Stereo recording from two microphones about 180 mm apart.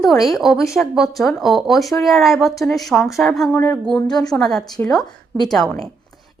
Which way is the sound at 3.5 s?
15° left (ahead or behind).